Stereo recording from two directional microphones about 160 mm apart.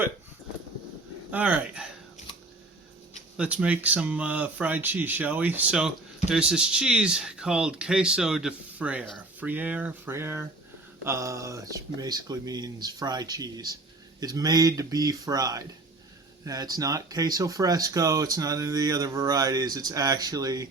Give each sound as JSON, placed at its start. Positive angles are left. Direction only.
{"t": 1.3, "sound": "speech", "side_deg": -10}
{"t": 3.3, "sound": "speech", "side_deg": -5}